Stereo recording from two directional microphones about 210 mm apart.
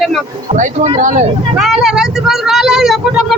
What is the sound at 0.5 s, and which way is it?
Speech, 35° right (ahead or behind).